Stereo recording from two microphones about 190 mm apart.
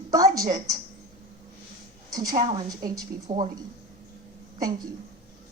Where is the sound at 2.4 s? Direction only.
25° right (ahead or behind).